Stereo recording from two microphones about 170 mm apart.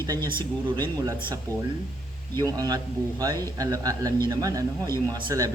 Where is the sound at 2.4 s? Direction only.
20° right (ahead or behind).